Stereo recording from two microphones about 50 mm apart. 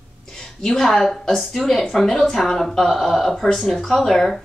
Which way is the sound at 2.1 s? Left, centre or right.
Centre.